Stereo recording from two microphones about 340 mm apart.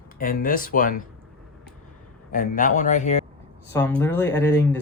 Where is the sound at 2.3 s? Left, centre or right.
Left.